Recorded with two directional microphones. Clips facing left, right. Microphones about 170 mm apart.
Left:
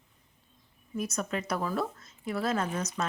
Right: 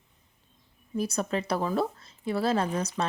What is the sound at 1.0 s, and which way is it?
Speech, 30° right (ahead or behind).